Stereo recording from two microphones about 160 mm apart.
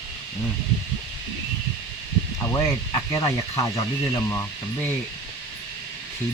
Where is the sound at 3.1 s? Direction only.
25° left (ahead or behind).